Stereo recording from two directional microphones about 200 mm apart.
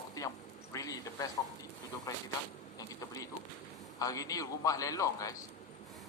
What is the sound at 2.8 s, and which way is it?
A man's voice, 15° left (ahead or behind).